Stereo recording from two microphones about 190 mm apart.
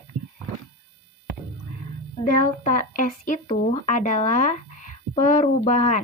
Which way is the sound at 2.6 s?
45° left (ahead or behind).